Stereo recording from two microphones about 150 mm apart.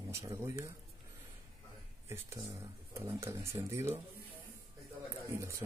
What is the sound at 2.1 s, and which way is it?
Speech, 20° right (ahead or behind).